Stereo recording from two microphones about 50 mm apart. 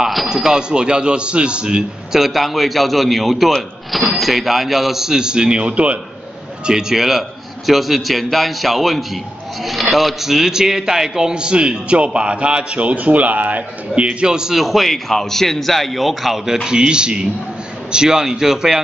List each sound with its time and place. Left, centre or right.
0.0 s music: centre
0.3 s a man's voice: centre
6.6 s a man's voice: centre
16.6 s a man's voice: centre